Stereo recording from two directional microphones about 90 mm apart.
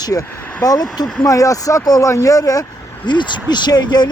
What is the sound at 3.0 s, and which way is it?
Speech, 55° left (ahead or behind).